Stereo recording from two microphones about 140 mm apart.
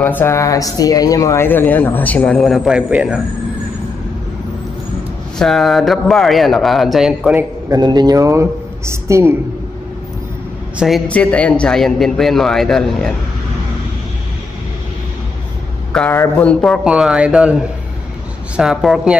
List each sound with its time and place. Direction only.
0.0 s speech: 15° left (ahead or behind); by 3.2 s 5° right (ahead or behind)
5.4 s a man's voice: centre (ahead or behind)
7.7 s speech: 30° right (ahead or behind)
11.1 s a man's voice: 10° left (ahead or behind)
15.9 s speech: 10° left (ahead or behind)
16.8 s a man's voice: 5° right (ahead or behind)